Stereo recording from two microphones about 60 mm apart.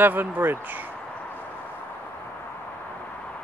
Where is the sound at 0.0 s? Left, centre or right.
Right.